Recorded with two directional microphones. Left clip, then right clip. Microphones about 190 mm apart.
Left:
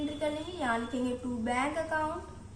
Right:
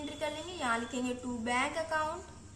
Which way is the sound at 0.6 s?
35° right (ahead or behind).